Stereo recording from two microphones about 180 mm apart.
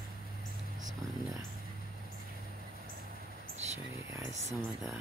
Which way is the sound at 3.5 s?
40° right (ahead or behind).